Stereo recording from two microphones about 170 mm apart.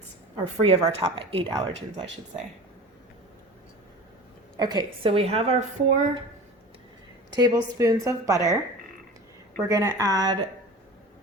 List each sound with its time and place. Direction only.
0.3 s a woman's voice: 35° right (ahead or behind)
4.5 s a woman's voice: 25° right (ahead or behind)
5.0 s speech: 35° right (ahead or behind)
7.3 s a woman's voice: 20° right (ahead or behind)
9.6 s a woman's voice: 20° right (ahead or behind)